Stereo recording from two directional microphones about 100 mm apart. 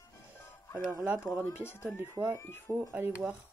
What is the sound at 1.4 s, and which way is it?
Speech, 25° left (ahead or behind).